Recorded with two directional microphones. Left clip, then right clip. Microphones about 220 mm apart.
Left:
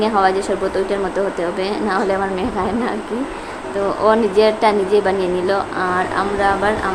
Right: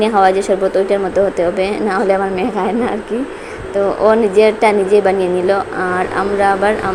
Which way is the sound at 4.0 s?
10° right (ahead or behind).